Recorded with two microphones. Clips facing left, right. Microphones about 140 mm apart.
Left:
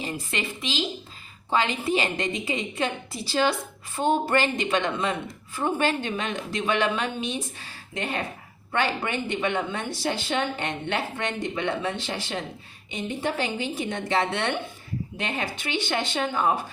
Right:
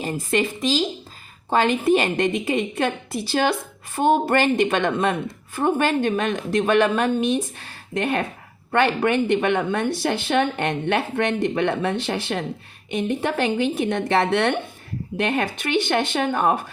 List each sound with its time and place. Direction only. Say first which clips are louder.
0.0 s a woman's voice: right 8 dB; 50° right (ahead or behind)
1.5 s a woman's voice: right 6 dB; 50° right (ahead or behind)